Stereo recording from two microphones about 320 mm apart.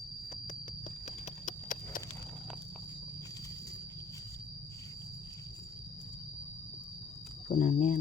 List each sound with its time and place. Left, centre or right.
1.0 s clip-clop: left
7.4 s speech: left